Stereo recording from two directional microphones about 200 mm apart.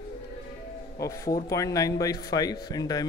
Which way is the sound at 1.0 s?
15° left (ahead or behind).